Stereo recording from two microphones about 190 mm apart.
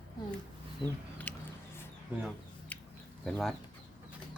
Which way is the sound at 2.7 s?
5° left (ahead or behind).